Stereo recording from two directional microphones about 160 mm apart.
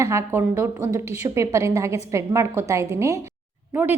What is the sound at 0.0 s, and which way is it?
A woman's voice, 20° right (ahead or behind).